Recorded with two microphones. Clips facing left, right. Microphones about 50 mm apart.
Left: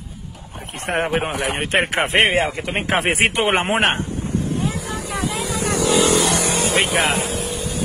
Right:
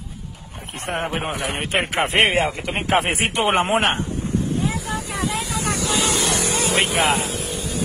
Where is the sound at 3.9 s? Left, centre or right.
Left.